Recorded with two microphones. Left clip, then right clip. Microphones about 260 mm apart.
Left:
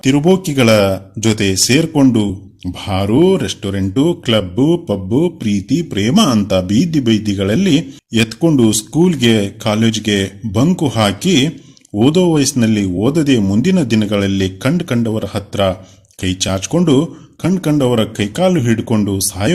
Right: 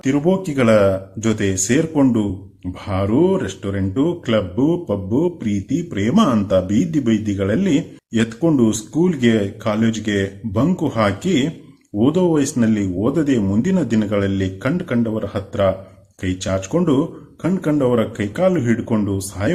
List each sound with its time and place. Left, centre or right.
0.0 s speech: left